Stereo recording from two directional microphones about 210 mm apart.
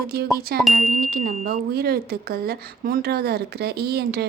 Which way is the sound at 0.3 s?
45° right (ahead or behind).